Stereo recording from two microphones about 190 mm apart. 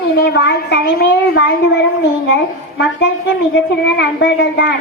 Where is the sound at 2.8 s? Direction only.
70° left (ahead or behind).